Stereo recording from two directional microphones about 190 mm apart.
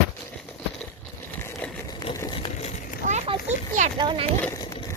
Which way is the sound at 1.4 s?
10° left (ahead or behind).